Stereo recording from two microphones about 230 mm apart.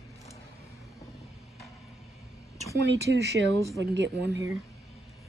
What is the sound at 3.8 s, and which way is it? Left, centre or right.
Speech, right.